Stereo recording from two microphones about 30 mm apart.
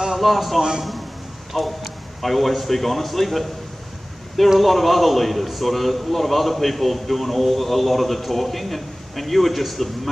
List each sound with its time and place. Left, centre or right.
0.1 s a man's voice: centre
0.6 s a man's voice: centre
1.6 s a man's voice: centre
4.6 s a man's voice: centre